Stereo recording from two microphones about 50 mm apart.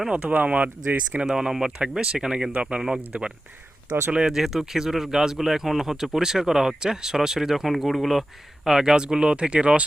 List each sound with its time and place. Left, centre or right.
0.2 s speech: right
1.3 s speech: centre
4.4 s speech: centre; by 9.8 s right